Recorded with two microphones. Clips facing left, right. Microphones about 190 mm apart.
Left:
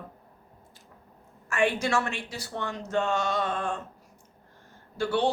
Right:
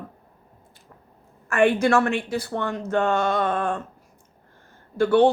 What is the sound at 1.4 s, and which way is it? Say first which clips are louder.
A woman's voice: right 7 dB; 55° right (ahead or behind).